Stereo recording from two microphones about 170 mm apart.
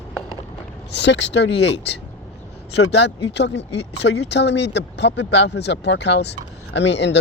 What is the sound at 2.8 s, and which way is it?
Speech, 90° left.